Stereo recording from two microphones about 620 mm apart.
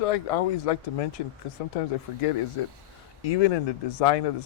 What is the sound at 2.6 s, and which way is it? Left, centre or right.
Speech, left.